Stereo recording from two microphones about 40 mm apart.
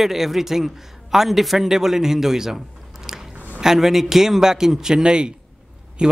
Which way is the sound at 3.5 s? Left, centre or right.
Centre.